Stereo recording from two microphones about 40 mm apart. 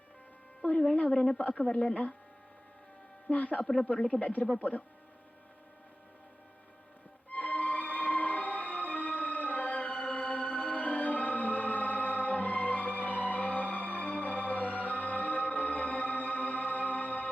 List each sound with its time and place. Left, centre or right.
1.0 s speech: centre
1.4 s speech: left
1.6 s speech: left
3.3 s speech: left
3.6 s speech: centre
4.2 s speech: left
7.3 s music: left